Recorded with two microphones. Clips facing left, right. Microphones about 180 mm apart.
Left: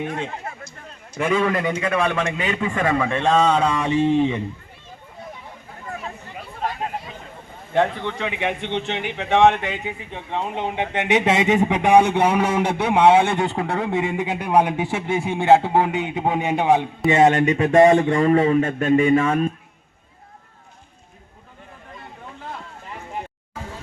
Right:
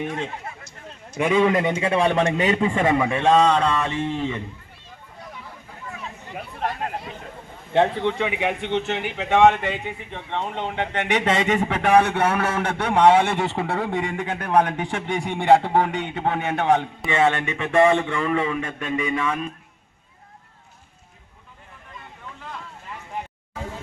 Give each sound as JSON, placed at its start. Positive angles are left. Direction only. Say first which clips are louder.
{"t": 1.2, "sound": "a man's voice", "louder": "right 2 dB", "side_deg": -20}
{"t": 3.2, "sound": "a man's voice", "louder": "even", "side_deg": 0}
{"t": 7.7, "sound": "a man's voice", "louder": "right 1 dB", "side_deg": -25}
{"t": 8.3, "sound": "a man's voice", "louder": "right 1 dB", "side_deg": -10}
{"t": 17.2, "sound": "speech", "louder": "left 5 dB", "side_deg": 40}